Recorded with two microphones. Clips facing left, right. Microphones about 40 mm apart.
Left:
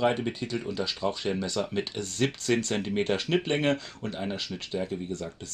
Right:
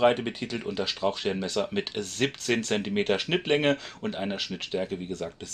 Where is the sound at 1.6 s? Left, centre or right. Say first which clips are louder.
Right 2 dB; right.